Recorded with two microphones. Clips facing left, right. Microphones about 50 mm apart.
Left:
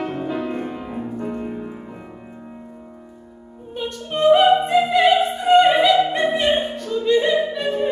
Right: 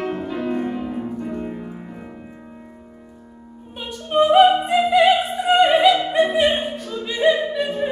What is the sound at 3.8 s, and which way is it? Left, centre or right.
Opera, centre.